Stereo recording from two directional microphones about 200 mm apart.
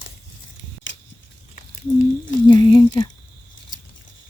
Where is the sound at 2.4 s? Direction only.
25° left (ahead or behind).